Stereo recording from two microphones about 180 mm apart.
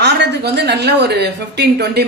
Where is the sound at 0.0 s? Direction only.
70° right (ahead or behind).